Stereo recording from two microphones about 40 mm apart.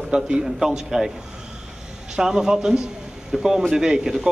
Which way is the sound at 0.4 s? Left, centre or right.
Centre.